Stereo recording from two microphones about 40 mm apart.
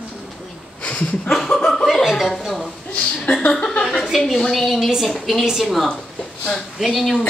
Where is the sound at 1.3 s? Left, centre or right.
Centre.